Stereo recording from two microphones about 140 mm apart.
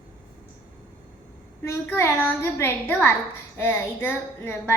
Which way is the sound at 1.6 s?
20° left (ahead or behind).